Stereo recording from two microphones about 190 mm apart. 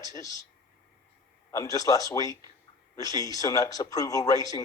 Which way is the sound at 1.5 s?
15° left (ahead or behind).